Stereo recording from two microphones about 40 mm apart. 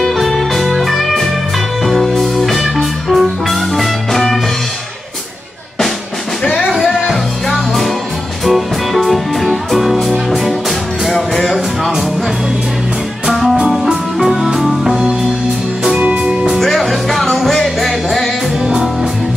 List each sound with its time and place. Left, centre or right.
0.0 s music: centre
6.7 s music: centre
13.3 s music: centre
16.0 s music: right
16.5 s music: centre